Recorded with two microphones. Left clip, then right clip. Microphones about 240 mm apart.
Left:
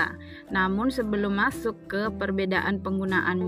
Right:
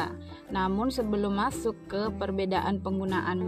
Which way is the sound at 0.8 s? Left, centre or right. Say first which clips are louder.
Left 2 dB; left.